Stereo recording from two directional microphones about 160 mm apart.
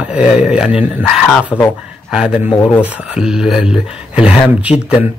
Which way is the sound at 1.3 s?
10° left (ahead or behind).